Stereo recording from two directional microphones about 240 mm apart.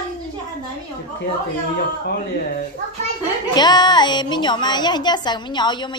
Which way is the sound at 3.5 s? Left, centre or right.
Centre.